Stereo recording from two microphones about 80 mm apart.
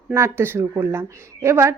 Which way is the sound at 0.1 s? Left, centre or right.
Right.